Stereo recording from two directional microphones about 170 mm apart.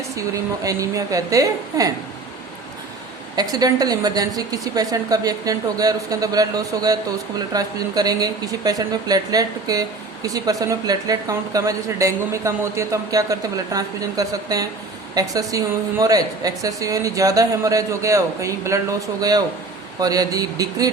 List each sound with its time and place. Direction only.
0.2 s a woman's voice: 20° right (ahead or behind)
3.3 s a woman's voice: 20° right (ahead or behind)